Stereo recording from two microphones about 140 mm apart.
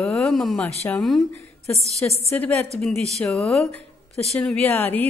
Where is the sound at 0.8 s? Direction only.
5° left (ahead or behind).